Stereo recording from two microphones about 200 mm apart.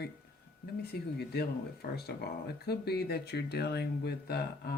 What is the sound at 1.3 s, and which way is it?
Speech, 50° left (ahead or behind).